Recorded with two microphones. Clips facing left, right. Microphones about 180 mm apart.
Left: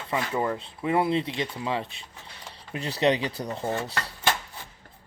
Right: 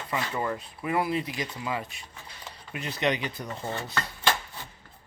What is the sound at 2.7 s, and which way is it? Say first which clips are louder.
Rub: left 4 dB; 35° left (ahead or behind).